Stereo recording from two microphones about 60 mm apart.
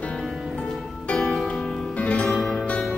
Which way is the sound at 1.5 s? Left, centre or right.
Left.